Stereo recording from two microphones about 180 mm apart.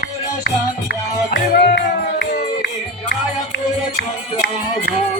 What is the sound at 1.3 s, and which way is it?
Music, 60° left (ahead or behind).